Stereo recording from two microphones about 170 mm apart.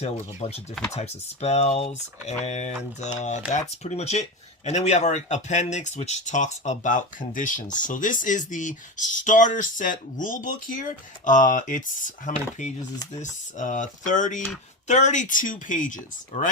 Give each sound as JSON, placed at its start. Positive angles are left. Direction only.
{"t": 0.0, "sound": "speech", "side_deg": 40}